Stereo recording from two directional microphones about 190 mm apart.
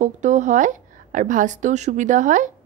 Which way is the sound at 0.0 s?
40° right (ahead or behind).